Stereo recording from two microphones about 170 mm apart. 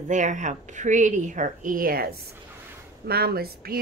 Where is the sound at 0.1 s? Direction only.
45° right (ahead or behind).